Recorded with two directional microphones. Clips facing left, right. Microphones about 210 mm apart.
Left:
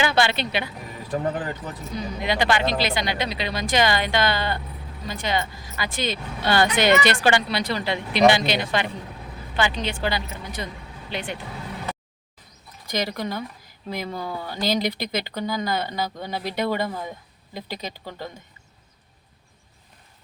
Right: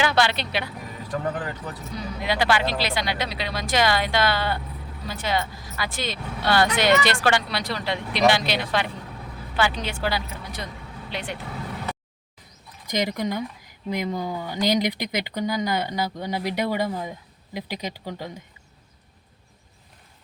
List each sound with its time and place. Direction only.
0.0 s speech: centre (ahead or behind)
1.1 s speech: 30° left (ahead or behind)
2.0 s speech: centre (ahead or behind)
12.9 s speech: 15° right (ahead or behind)